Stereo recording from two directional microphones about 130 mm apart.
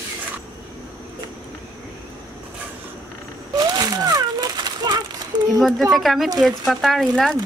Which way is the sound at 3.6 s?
30° right (ahead or behind).